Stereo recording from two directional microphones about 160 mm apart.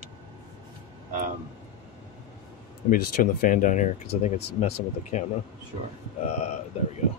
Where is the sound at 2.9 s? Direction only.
55° left (ahead or behind).